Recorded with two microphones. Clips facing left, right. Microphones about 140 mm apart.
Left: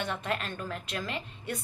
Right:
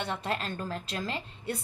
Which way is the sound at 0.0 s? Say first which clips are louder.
Even; 35° right (ahead or behind).